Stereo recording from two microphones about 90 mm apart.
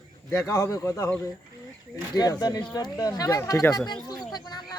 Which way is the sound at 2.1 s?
45° left (ahead or behind).